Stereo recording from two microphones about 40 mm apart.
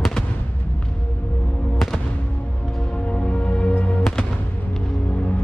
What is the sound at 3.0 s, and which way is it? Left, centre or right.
Music, left.